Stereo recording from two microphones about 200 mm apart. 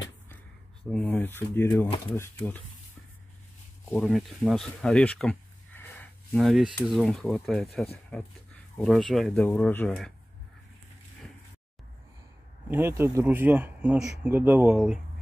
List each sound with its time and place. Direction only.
0.9 s speech: 10° left (ahead or behind)
3.9 s speech: centre (ahead or behind)
12.6 s speech: 10° right (ahead or behind)